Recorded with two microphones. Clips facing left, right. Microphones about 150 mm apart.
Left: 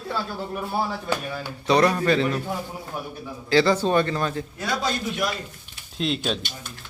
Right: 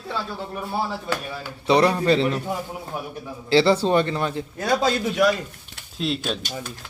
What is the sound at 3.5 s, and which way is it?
Speech, 25° right (ahead or behind).